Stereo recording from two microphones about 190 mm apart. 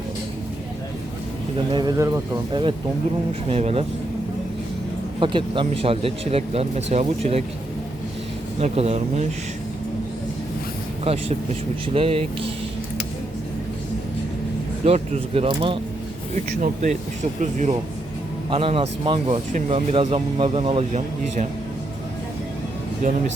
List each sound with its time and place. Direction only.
1.7 s speech: 20° right (ahead or behind)
5.2 s speech: 25° right (ahead or behind)
8.5 s speech: 35° right (ahead or behind)
11.0 s speech: 30° right (ahead or behind)
14.8 s speech: 35° right (ahead or behind)
16.3 s speech: 45° right (ahead or behind)
18.5 s speech: 30° right (ahead or behind)